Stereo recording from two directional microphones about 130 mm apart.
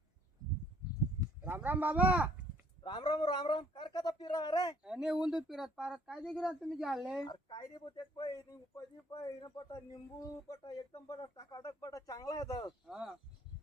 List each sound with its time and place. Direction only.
1.4 s speech: 15° right (ahead or behind)
2.8 s speech: 35° left (ahead or behind)
4.8 s speech: 5° right (ahead or behind)
7.3 s speech: 35° left (ahead or behind)
12.9 s speech: 5° right (ahead or behind)